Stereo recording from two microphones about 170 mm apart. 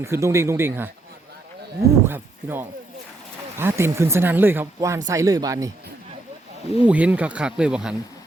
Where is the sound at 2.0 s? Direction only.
15° right (ahead or behind).